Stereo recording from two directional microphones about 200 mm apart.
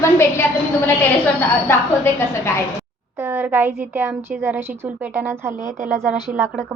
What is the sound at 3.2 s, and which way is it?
A woman's voice, 10° right (ahead or behind).